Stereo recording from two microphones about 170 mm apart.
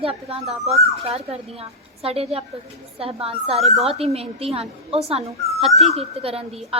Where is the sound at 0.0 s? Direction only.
35° right (ahead or behind).